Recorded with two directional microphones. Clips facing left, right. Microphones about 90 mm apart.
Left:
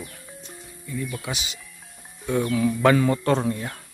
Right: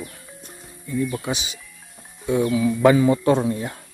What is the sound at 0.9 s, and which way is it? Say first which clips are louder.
Speech: right 6 dB; 30° right (ahead or behind).